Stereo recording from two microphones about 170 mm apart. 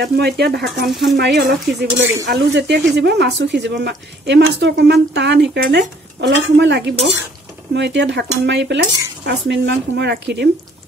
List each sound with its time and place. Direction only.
0.0 s speech: 75° right (ahead or behind)
0.8 s speech: centre (ahead or behind)
1.1 s speech: 80° right
3.0 s a woman's voice: 90° right